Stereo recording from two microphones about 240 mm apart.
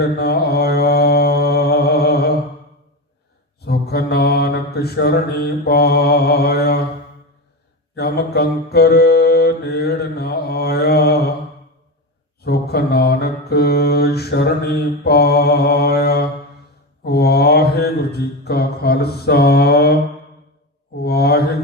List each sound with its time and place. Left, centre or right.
0.0 s mantra: left
3.6 s mantra: left
7.9 s mantra: left
12.4 s mantra: left